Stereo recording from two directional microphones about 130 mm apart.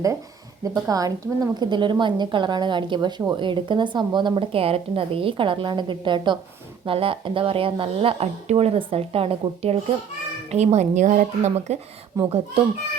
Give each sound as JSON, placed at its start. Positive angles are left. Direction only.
{"t": 0.6, "sound": "a woman's voice", "side_deg": -30}
{"t": 12.1, "sound": "a child's voice", "side_deg": -25}